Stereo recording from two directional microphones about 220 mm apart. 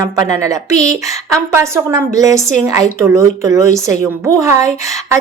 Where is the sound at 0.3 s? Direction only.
15° right (ahead or behind).